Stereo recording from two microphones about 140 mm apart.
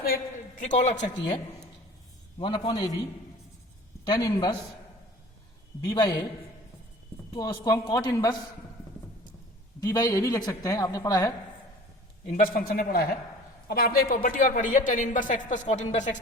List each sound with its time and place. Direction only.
0.6 s a man's voice: 60° left (ahead or behind)
2.4 s speech: 35° left (ahead or behind)
4.0 s speech: 30° left (ahead or behind)
5.8 s a woman's voice: 30° left (ahead or behind)
7.3 s a woman's voice: 30° left (ahead or behind)
9.8 s a woman's voice: 25° left (ahead or behind)
12.4 s a man's voice: 85° left; by 16.1 s 55° left (ahead or behind)